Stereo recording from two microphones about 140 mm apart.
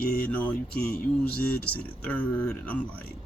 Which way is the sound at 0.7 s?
90° left.